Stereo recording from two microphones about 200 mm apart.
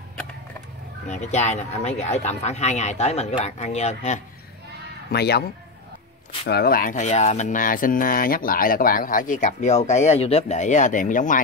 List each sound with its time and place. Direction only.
1.0 s speech: 35° left (ahead or behind)
5.1 s speech: 55° left (ahead or behind)
6.4 s speech: 50° left (ahead or behind)